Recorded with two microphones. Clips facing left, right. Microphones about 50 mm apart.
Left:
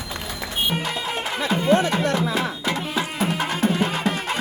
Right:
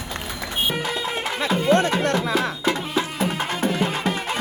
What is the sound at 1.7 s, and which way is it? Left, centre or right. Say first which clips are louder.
Music: right 1 dB; right.